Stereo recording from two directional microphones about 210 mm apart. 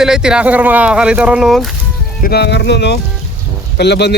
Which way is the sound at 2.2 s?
50° left (ahead or behind).